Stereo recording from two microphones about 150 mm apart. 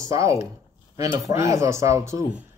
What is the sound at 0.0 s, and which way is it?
Speech, 20° right (ahead or behind).